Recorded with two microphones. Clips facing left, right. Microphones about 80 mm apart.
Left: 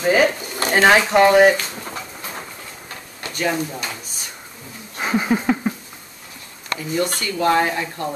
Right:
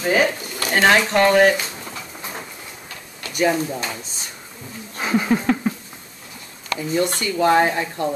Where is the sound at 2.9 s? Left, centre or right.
Left.